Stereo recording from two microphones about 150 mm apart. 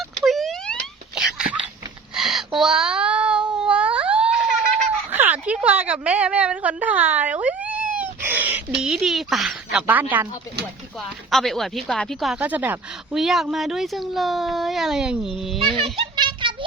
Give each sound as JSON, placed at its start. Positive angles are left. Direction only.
{"t": 0.3, "sound": "wail", "side_deg": 0}
{"t": 2.1, "sound": "a sound", "side_deg": 0}
{"t": 8.8, "sound": "speech", "side_deg": -5}
{"t": 11.3, "sound": "speech", "side_deg": 0}
{"t": 12.4, "sound": "speech", "side_deg": -10}
{"t": 15.5, "sound": "children playing", "side_deg": -35}